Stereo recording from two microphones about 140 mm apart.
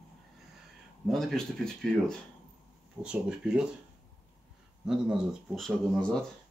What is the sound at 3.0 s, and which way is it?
Speech, 5° right (ahead or behind).